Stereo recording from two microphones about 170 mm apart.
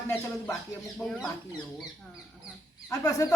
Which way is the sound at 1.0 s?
5° left (ahead or behind).